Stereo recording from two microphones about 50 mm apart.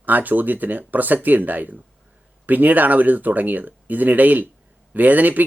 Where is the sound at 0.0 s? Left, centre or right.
Right.